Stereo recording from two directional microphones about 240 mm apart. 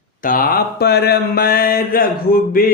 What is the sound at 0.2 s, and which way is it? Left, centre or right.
Mantra, left.